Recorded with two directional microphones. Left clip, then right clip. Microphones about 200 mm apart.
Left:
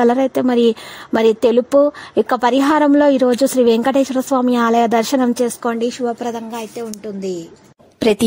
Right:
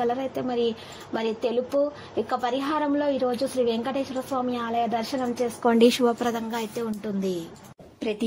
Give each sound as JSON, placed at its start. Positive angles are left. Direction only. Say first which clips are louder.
{"t": 0.0, "sound": "a woman's voice", "louder": "left 12 dB", "side_deg": 50}
{"t": 5.8, "sound": "speech", "louder": "right 2 dB", "side_deg": -5}
{"t": 6.0, "sound": "speech", "louder": "left 3 dB", "side_deg": 10}
{"t": 8.0, "sound": "speech", "louder": "left 14 dB", "side_deg": 65}